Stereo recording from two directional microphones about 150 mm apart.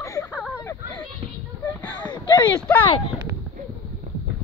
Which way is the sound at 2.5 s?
10° left (ahead or behind).